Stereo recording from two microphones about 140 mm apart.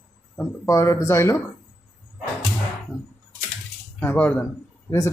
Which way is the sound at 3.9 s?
10° left (ahead or behind).